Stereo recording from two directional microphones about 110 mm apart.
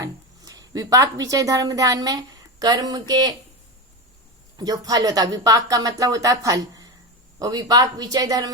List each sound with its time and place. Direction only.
0.0 s speech: 30° right (ahead or behind)
4.5 s speech: 35° right (ahead or behind)